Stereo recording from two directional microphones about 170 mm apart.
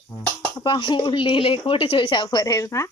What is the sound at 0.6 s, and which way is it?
Speech, 25° left (ahead or behind).